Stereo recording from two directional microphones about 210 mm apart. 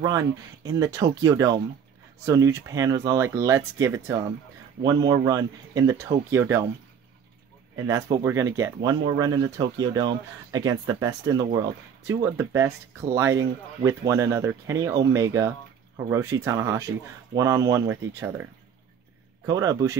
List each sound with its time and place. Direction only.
0.0 s speech: 20° right (ahead or behind)
7.7 s speech: 15° right (ahead or behind)